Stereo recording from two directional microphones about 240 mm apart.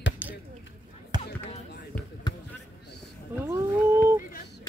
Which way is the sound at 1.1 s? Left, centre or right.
Centre.